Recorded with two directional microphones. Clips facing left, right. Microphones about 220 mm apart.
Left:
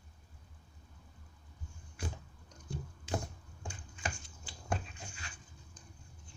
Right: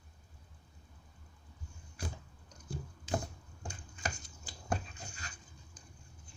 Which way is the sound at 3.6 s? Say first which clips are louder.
Right 1 dB; 40° right (ahead or behind).